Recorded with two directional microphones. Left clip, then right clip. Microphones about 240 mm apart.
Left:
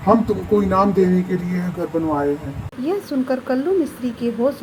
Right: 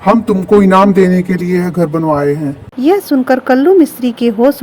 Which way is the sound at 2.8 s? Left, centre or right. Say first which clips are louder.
Right 11 dB; right.